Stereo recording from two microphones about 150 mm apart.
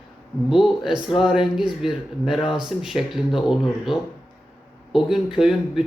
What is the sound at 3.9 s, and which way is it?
Speech, 35° left (ahead or behind).